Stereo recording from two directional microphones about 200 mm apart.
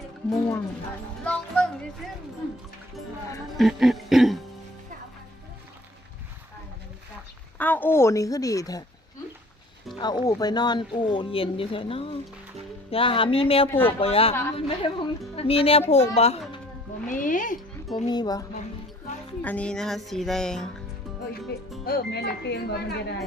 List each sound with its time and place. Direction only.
0.3 s speech: centre (ahead or behind)
3.6 s speech: centre (ahead or behind)
7.6 s a woman's voice: 10° left (ahead or behind)
9.9 s speech: 20° left (ahead or behind); by 17.6 s 40° left (ahead or behind)
17.9 s speech: 20° left (ahead or behind)
19.4 s speech: 5° left (ahead or behind)
21.8 s speech: 55° left (ahead or behind)